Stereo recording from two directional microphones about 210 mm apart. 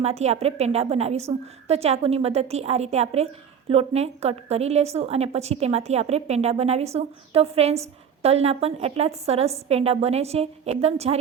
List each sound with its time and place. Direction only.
0.0 s a woman's voice: 30° right (ahead or behind)